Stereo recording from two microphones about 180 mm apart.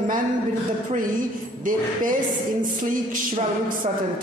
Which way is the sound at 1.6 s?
50° right (ahead or behind).